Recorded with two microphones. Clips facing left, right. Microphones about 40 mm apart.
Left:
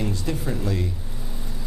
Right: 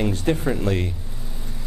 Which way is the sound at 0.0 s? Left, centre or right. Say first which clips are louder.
Right 5 dB; right.